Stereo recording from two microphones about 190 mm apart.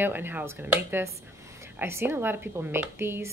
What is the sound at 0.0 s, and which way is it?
A woman's voice, 10° right (ahead or behind).